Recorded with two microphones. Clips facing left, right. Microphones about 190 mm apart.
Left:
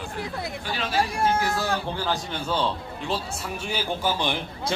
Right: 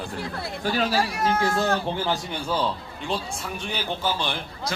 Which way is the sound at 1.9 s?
20° right (ahead or behind).